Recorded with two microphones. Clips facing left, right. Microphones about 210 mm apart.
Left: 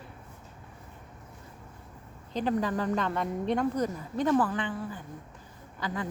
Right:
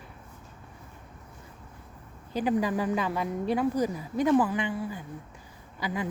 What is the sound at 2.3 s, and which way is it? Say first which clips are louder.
Speech: right 2 dB; 10° right (ahead or behind).